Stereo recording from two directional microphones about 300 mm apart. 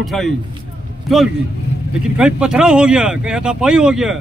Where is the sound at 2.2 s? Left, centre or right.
Centre.